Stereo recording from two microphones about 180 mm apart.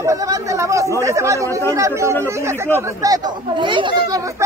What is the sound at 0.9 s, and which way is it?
Speech, 15° right (ahead or behind).